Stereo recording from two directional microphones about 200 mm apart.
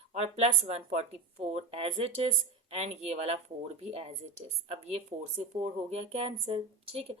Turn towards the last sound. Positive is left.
turn(degrees=-30)  # may be behind; listen again after turning